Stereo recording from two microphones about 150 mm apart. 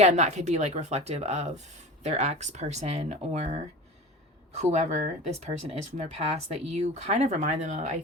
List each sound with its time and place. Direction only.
0.0 s speech: 50° right (ahead or behind)